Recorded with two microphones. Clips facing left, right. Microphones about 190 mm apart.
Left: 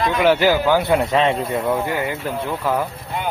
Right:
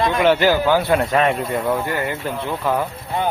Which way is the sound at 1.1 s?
25° left (ahead or behind).